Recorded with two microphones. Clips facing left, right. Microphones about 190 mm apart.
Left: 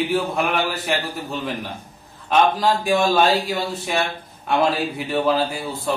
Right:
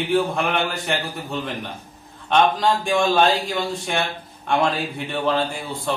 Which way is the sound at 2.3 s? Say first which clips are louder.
Even; 5° left (ahead or behind).